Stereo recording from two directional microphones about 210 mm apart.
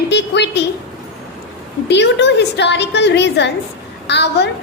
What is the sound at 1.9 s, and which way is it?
A woman's voice, 55° left (ahead or behind).